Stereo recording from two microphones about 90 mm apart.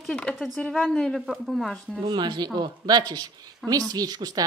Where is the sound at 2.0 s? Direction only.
55° right (ahead or behind).